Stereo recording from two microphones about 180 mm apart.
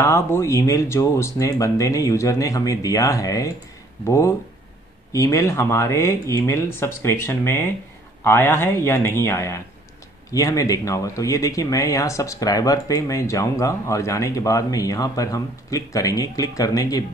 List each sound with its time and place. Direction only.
0.0 s speech: 15° left (ahead or behind)